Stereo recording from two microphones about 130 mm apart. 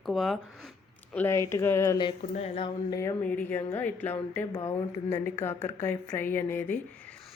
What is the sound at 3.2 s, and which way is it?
A woman's voice, 10° left (ahead or behind).